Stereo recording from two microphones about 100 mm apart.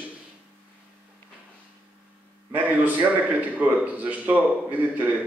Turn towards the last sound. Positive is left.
turn(degrees=-15)  # may be behind; listen again after turning